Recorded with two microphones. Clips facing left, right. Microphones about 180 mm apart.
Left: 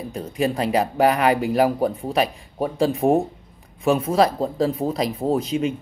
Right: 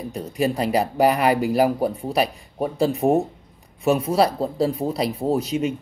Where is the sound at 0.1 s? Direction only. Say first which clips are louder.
Even; 5° right (ahead or behind).